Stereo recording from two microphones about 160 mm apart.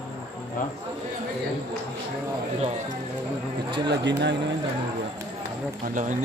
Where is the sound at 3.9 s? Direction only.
90° right.